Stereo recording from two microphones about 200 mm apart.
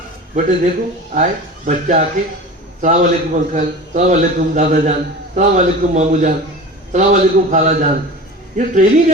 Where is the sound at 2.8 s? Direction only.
40° right (ahead or behind).